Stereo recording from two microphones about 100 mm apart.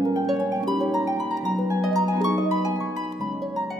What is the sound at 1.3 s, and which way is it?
Harp, 35° right (ahead or behind).